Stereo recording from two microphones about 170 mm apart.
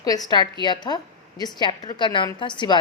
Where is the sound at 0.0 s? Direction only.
20° left (ahead or behind).